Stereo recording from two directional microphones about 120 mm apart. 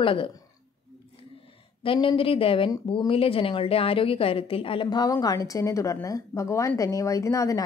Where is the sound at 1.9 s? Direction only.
45° left (ahead or behind).